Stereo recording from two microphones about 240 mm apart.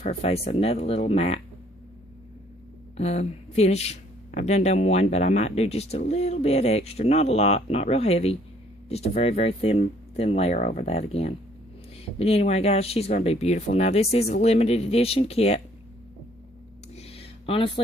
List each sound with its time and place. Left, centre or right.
0.0 s speech: left
3.0 s speech: left
16.9 s a sound: left